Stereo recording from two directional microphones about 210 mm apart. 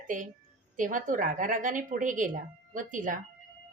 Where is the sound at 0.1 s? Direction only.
40° right (ahead or behind).